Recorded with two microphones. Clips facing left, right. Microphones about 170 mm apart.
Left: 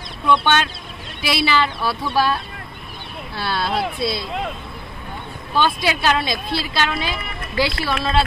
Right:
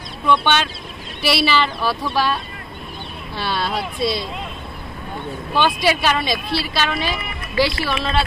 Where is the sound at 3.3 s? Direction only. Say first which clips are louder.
Right 1 dB; 15° right (ahead or behind).